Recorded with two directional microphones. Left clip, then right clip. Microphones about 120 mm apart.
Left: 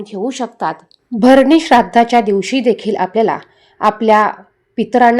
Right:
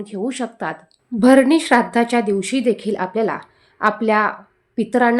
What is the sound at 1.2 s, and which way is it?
Speech, 35° left (ahead or behind).